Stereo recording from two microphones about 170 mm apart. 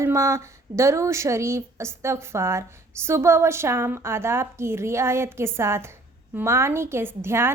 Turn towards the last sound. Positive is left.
turn(degrees=-15)  # may be behind; listen again after turning